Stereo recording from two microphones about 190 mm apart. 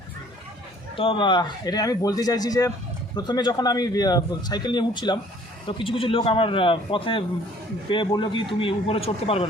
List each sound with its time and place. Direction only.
0.9 s speech: 25° left (ahead or behind)